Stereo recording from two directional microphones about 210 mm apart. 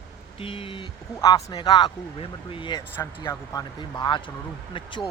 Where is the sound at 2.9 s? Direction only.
10° left (ahead or behind).